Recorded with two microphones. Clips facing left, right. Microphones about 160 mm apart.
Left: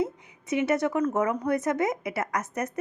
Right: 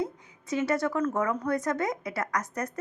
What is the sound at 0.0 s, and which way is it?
A woman's voice, 20° left (ahead or behind).